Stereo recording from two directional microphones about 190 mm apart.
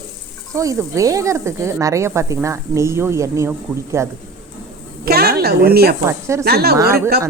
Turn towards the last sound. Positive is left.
turn(degrees=-55)  # may be behind; listen again after turning